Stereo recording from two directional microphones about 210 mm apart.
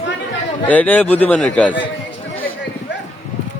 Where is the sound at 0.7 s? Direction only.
10° left (ahead or behind).